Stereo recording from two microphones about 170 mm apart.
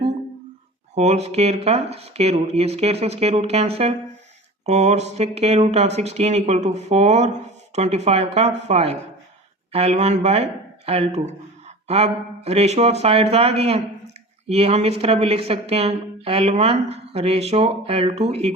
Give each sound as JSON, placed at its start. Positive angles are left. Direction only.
{"t": 0.9, "sound": "speech", "side_deg": -40}